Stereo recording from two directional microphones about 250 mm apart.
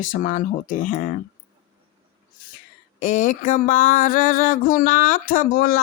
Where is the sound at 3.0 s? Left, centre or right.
Left.